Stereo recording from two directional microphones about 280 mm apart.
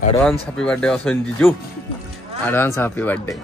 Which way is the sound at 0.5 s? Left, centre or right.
Centre.